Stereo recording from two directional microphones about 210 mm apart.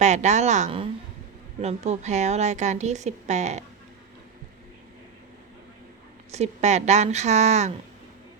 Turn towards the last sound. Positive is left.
turn(degrees=-30)  # may be behind; listen again after turning